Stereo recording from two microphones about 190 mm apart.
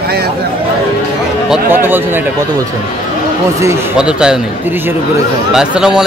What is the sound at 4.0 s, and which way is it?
Speech, 5° right (ahead or behind).